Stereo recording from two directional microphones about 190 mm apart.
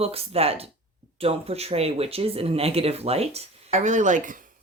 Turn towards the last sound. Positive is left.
turn(degrees=-45)  # may be behind; listen again after turning